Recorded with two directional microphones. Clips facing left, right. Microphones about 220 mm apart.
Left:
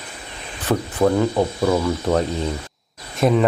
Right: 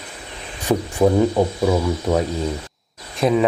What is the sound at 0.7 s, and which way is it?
Speech, 15° right (ahead or behind).